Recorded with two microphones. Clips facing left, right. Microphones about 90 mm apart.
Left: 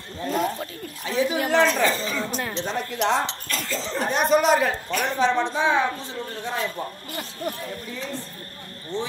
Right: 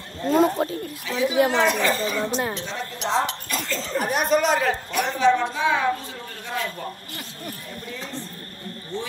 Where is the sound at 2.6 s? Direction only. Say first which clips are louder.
Left 4 dB; 55° left (ahead or behind).